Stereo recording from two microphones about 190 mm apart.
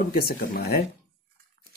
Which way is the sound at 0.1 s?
50° left (ahead or behind).